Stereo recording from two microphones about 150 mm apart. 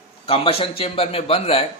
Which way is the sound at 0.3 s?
40° left (ahead or behind).